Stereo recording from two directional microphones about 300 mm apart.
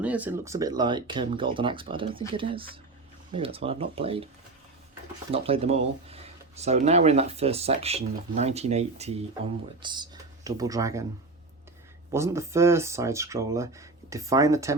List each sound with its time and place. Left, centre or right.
0.0 s speech: centre
5.3 s speech: centre
12.1 s speech: centre